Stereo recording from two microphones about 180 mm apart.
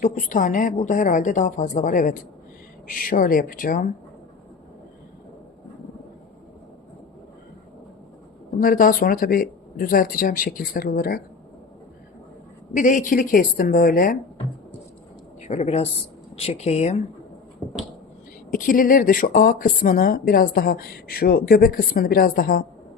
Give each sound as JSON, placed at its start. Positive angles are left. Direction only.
{"t": 0.0, "sound": "speech", "side_deg": 45}
{"t": 8.6, "sound": "speech", "side_deg": 50}
{"t": 12.7, "sound": "speech", "side_deg": 45}
{"t": 15.4, "sound": "a woman's voice", "side_deg": 35}
{"t": 17.6, "sound": "a sound", "side_deg": 0}
{"t": 18.5, "sound": "speech", "side_deg": 50}